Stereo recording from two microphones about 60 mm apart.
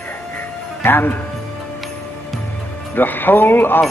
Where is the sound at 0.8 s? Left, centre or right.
Left.